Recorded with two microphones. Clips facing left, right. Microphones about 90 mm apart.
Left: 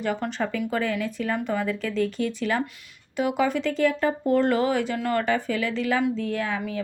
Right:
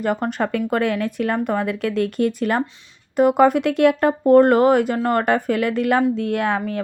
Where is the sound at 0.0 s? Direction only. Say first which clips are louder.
Right 5 dB; 45° right (ahead or behind); by 4.1 s 65° right (ahead or behind).